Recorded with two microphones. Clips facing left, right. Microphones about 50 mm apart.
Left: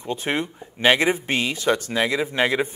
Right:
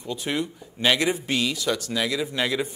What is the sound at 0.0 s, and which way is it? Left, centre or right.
Speech, left.